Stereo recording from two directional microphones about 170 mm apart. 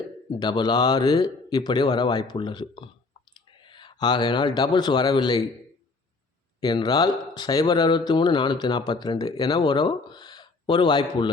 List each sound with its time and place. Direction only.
0.3 s speech: 25° left (ahead or behind)
6.6 s speech: 25° left (ahead or behind)